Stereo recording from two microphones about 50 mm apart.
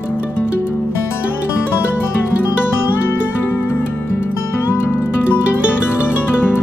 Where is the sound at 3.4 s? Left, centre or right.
Left.